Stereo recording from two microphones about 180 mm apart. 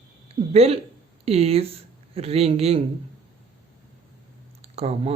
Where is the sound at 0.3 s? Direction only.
35° right (ahead or behind).